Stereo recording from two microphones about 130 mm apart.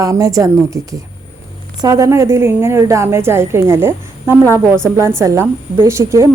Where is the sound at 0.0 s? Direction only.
25° right (ahead or behind).